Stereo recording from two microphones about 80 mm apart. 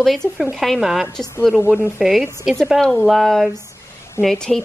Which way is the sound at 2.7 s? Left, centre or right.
Centre.